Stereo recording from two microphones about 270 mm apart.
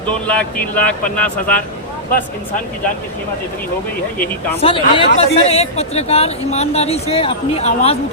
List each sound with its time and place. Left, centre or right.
0.3 s speech: centre
4.6 s speech: centre